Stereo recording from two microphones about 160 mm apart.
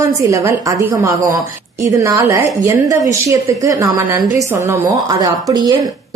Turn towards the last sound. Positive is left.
turn(degrees=-25)  # may be behind; listen again after turning